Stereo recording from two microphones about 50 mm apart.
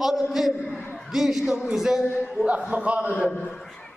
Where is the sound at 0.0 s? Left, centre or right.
Centre.